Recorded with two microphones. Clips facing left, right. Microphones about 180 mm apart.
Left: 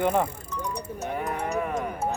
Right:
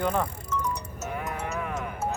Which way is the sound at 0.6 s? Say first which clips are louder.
Left 4 dB; 35° left (ahead or behind).